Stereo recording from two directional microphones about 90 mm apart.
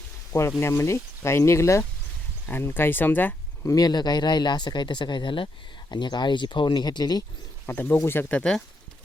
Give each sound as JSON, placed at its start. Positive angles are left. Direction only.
{"t": 0.6, "sound": "speech", "side_deg": 35}
{"t": 3.6, "sound": "speech", "side_deg": 40}
{"t": 7.7, "sound": "speech", "side_deg": 20}
{"t": 8.4, "sound": "speech", "side_deg": 5}